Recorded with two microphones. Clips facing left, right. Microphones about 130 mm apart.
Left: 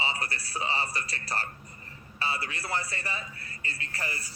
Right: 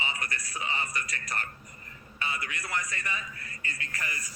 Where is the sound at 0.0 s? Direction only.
30° left (ahead or behind).